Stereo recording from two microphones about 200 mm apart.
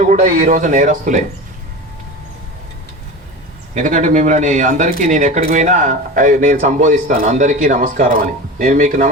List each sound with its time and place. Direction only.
0.0 s speech: 40° right (ahead or behind)
3.8 s speech: 40° right (ahead or behind)